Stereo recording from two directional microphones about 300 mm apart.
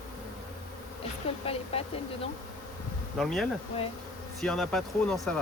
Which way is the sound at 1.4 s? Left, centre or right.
Centre.